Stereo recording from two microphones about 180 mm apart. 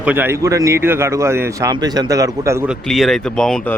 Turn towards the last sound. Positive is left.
turn(degrees=5)  # may be behind; listen again after turning